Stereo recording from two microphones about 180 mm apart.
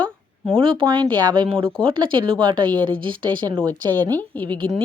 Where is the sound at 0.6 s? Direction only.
30° right (ahead or behind).